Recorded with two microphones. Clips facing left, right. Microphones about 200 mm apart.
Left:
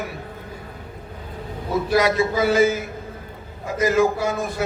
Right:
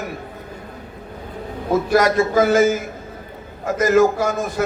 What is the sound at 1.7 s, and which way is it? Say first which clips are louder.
A man's voice: right 3 dB; 45° right (ahead or behind).